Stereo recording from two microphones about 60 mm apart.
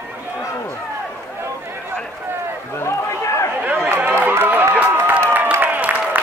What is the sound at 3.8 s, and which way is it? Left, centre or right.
Run, right.